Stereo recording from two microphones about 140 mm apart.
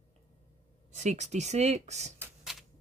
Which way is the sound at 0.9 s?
55° right (ahead or behind).